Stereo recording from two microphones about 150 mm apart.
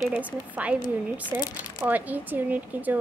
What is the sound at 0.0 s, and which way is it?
Speech, 10° right (ahead or behind).